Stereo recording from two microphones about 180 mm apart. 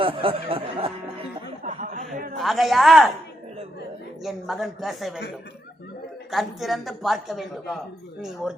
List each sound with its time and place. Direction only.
0.0 s speech: 30° right (ahead or behind)
1.6 s a sound: 50° right (ahead or behind)
2.4 s a woman's voice: centre (ahead or behind)
4.2 s a woman's voice: centre (ahead or behind)
6.3 s a woman's voice: centre (ahead or behind)